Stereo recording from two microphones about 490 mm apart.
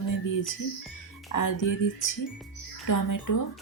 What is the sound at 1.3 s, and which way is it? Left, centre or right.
Speech, left.